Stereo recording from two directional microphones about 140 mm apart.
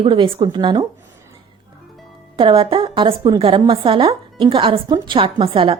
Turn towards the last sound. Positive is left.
turn(degrees=-40)  # may be behind; listen again after turning